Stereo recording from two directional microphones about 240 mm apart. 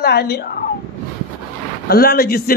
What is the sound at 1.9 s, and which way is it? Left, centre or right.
Speech, left.